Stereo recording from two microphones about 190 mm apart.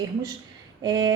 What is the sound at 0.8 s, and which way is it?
Speech, 20° right (ahead or behind).